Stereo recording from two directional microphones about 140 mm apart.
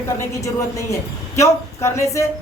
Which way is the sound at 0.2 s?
20° left (ahead or behind).